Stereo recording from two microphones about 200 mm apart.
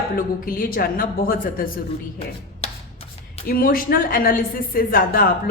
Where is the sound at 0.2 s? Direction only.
45° left (ahead or behind).